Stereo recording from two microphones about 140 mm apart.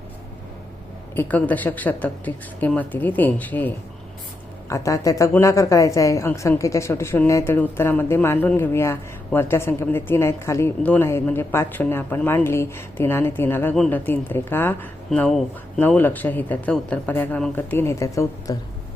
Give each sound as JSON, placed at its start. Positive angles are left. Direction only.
{"t": 1.1, "sound": "a woman's voice", "side_deg": 15}